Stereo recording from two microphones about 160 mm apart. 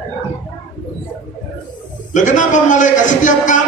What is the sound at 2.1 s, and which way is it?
A man's voice, 50° left (ahead or behind).